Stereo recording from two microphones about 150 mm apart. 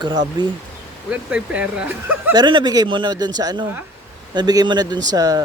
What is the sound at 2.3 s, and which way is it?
A woman's voice, 30° right (ahead or behind).